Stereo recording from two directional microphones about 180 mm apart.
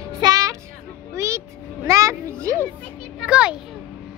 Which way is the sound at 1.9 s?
15° right (ahead or behind).